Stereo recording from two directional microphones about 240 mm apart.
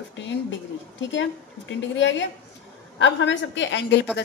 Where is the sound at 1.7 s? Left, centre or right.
Left.